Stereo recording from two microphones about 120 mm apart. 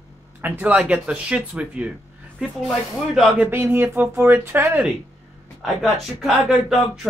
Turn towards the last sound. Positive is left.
turn(degrees=0)  # may be behind; listen again after turning